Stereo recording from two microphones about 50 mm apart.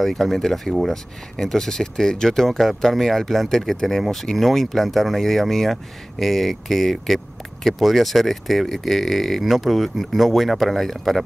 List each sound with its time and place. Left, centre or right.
0.0 s speech: centre